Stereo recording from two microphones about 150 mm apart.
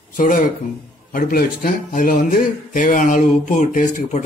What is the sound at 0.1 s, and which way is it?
Speech, 65° left (ahead or behind).